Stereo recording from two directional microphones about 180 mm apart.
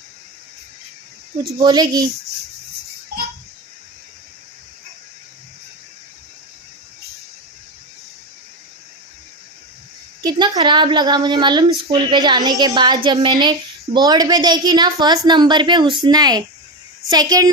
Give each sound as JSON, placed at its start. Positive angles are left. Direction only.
{"t": 1.5, "sound": "speech", "side_deg": -20}
{"t": 10.2, "sound": "a woman's voice", "side_deg": -25}